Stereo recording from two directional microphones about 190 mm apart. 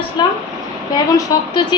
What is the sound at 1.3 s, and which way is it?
Speech, 20° left (ahead or behind).